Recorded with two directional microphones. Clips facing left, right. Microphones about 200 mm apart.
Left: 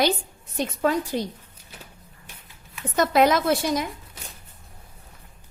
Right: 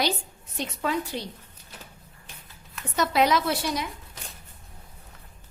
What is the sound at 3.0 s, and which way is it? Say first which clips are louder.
Speech: left 4 dB; 50° left (ahead or behind).